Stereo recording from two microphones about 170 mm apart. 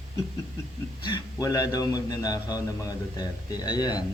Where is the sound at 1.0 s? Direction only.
25° left (ahead or behind).